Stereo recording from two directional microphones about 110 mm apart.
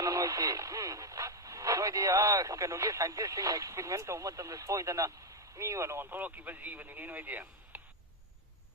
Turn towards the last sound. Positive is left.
turn(degrees=-15)  # may be behind; listen again after turning